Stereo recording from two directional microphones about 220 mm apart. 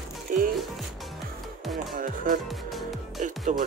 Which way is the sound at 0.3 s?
35° right (ahead or behind).